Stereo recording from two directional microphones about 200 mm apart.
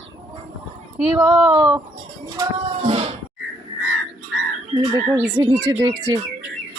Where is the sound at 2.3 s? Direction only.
25° right (ahead or behind).